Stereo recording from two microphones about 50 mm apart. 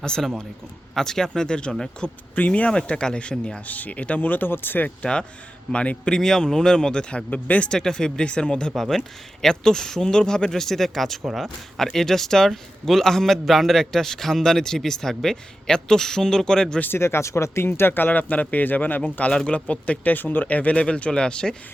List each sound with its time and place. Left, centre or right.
0.0 s a man's voice: centre
2.3 s speech: left
3.7 s speech: left
5.7 s a man's voice: left
7.3 s speech: left
7.7 s a man's voice: centre
8.7 s a man's voice: centre
16.9 s speech: left
17.7 s speech: left; by 21.5 s centre